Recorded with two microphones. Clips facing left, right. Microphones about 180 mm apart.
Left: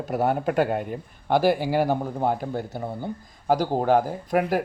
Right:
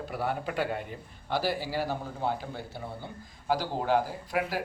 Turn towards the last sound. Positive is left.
turn(degrees=50)  # may be behind; listen again after turning